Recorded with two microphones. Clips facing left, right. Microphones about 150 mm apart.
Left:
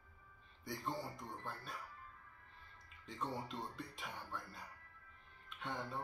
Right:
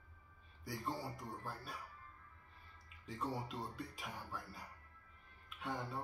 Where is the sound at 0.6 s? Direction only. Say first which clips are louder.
Even; 5° right (ahead or behind).